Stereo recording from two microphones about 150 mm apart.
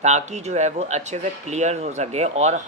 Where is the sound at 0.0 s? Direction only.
50° right (ahead or behind).